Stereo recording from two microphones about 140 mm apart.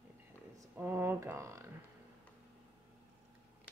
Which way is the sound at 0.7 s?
15° right (ahead or behind).